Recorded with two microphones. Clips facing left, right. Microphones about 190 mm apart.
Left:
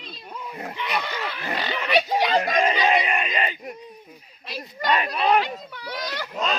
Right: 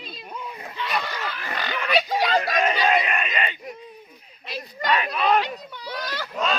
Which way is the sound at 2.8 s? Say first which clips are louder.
Even; 20° left (ahead or behind).